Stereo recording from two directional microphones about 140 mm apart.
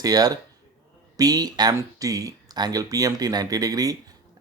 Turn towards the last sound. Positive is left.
turn(degrees=-25)  # may be behind; listen again after turning